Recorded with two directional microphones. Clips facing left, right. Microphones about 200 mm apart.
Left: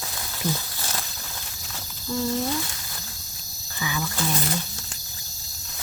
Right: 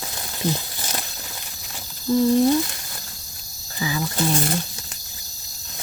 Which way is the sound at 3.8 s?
30° right (ahead or behind).